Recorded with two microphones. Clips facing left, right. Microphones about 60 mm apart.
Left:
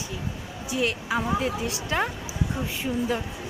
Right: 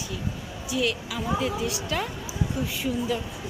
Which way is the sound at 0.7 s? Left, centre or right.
Left.